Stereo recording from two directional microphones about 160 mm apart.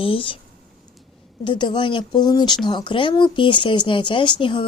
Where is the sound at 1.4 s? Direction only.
30° left (ahead or behind).